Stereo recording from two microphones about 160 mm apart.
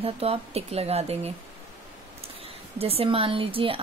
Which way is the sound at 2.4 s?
35° right (ahead or behind).